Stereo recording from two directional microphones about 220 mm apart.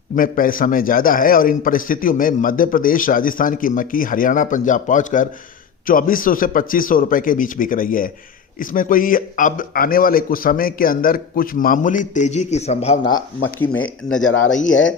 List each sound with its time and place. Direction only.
0.2 s a man's voice: 40° left (ahead or behind)
13.6 s speech: 5° left (ahead or behind)
14.3 s speech: 65° left (ahead or behind)